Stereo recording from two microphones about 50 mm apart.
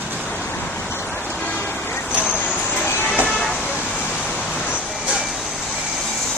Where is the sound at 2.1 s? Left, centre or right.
Right.